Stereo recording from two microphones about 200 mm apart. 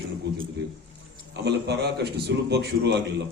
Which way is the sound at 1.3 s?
60° right (ahead or behind).